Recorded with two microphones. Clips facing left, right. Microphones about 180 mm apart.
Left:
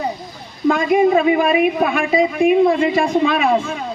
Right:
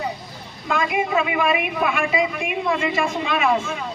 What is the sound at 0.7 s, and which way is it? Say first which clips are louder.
A man's voice: left 8 dB; 40° left (ahead or behind).